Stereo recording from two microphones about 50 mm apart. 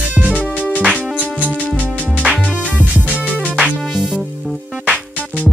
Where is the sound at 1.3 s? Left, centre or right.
Right.